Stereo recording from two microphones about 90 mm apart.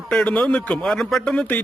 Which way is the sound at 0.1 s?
10° left (ahead or behind).